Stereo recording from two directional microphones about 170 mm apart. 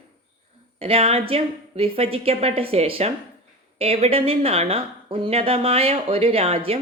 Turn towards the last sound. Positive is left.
turn(degrees=-35)  # may be behind; listen again after turning